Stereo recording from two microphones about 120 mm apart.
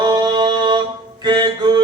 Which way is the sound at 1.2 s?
40° right (ahead or behind).